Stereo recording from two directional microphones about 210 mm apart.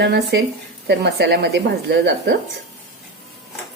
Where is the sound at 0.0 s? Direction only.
50° right (ahead or behind).